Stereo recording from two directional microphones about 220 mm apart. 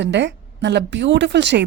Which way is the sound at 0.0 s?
55° right (ahead or behind).